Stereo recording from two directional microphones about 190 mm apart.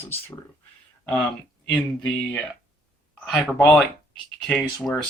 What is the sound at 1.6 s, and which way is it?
Speech, 5° left (ahead or behind).